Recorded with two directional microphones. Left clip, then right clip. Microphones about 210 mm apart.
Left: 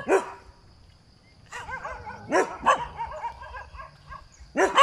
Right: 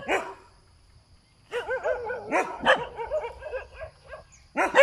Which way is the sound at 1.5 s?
45° right (ahead or behind).